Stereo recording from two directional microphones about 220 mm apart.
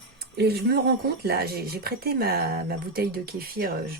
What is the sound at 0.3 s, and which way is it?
Speech, 45° right (ahead or behind).